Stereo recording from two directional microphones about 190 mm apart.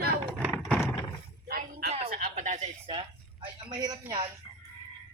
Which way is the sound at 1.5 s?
50° right (ahead or behind).